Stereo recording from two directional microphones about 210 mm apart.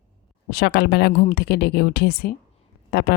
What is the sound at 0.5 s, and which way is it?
A woman's voice, 50° left (ahead or behind).